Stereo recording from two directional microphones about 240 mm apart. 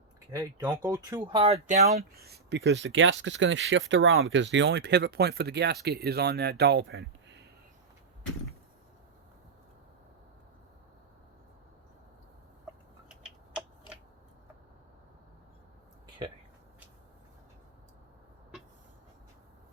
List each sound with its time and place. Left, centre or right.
0.3 s speech: centre
2.1 s speech: right
13.5 s finger snapping: centre